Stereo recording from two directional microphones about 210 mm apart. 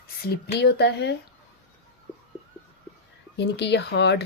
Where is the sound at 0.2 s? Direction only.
50° left (ahead or behind).